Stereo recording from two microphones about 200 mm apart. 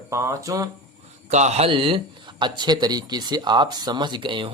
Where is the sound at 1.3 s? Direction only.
35° right (ahead or behind).